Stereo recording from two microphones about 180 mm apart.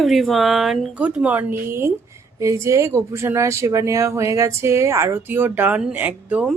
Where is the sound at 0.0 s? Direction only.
Centre (ahead or behind).